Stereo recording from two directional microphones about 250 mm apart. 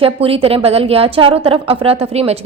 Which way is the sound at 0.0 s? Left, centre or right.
Right.